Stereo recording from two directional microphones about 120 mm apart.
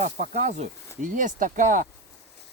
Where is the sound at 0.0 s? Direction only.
90° right.